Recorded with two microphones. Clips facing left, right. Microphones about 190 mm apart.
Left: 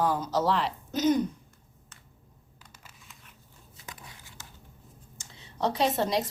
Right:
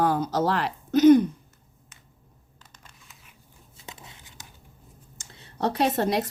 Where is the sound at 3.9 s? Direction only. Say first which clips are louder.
Right 2 dB; 25° right (ahead or behind).